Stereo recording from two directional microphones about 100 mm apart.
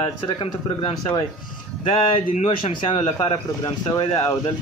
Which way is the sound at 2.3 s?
70° left (ahead or behind).